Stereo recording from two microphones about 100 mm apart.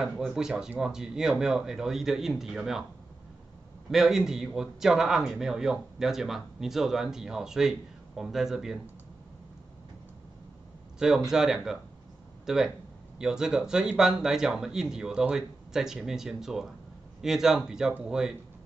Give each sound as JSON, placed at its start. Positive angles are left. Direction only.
{"t": 0.0, "sound": "a man's voice", "side_deg": -5}
{"t": 3.9, "sound": "a man's voice", "side_deg": -5}
{"t": 11.0, "sound": "a man's voice", "side_deg": -5}